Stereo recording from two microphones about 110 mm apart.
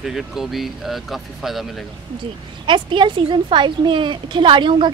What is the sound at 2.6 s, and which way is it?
Speech, 50° right (ahead or behind).